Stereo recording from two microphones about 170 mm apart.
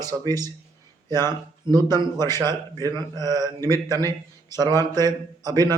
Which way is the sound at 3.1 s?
20° right (ahead or behind).